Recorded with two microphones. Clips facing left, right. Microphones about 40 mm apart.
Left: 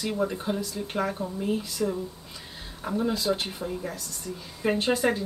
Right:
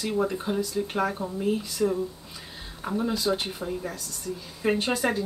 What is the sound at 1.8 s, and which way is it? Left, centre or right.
Speech, centre.